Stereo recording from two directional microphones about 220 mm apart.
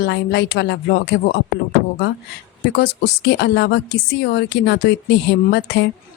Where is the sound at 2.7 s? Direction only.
45° left (ahead or behind).